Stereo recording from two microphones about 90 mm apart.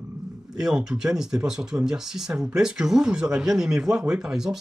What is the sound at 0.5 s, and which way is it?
Speech, 5° right (ahead or behind).